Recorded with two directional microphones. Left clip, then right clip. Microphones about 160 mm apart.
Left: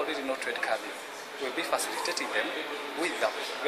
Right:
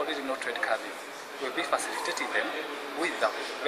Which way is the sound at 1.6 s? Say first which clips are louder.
Right 1 dB; 20° left (ahead or behind).